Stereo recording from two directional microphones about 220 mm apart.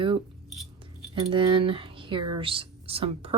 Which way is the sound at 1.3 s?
20° right (ahead or behind).